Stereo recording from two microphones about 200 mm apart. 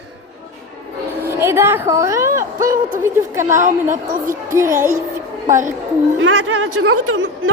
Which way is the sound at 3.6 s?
40° right (ahead or behind).